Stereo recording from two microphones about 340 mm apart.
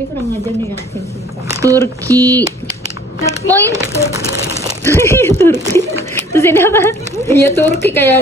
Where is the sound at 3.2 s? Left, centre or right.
Centre.